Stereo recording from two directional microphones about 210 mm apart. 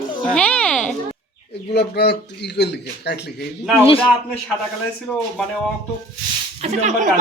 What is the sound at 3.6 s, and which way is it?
Speech, centre (ahead or behind).